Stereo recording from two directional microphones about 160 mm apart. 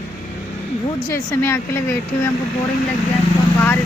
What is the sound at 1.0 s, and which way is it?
Speech, 15° left (ahead or behind).